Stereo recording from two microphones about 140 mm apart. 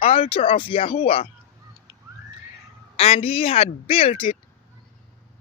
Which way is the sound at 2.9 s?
45° left (ahead or behind).